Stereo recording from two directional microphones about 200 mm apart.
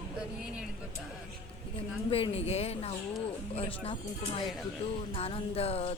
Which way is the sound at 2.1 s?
30° left (ahead or behind).